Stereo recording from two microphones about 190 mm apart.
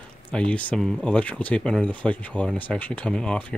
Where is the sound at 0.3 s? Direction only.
5° left (ahead or behind).